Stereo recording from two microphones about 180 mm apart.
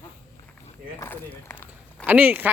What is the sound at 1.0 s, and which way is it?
Speech, 15° left (ahead or behind).